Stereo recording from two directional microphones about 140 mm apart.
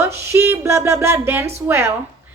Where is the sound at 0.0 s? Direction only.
20° right (ahead or behind).